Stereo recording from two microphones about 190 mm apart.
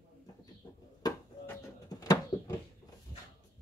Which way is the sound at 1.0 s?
20° left (ahead or behind).